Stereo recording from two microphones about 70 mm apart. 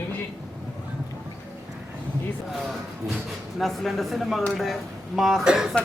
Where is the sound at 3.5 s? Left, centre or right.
Centre.